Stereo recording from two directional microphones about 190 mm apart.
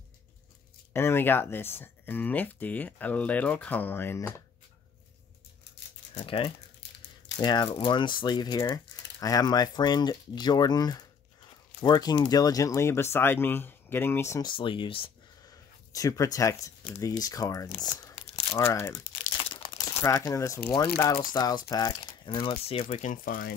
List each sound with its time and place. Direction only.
0.9 s speech: 10° left (ahead or behind)
6.1 s speech: 30° left (ahead or behind)
14.5 s speech: 25° left (ahead or behind)
19.2 s crumpling: 25° left (ahead or behind)
20.0 s speech: 15° left (ahead or behind); by 23.1 s 30° left (ahead or behind)
23.1 s speech: 50° left (ahead or behind)